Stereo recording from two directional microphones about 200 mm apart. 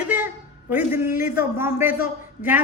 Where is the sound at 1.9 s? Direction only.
45° left (ahead or behind).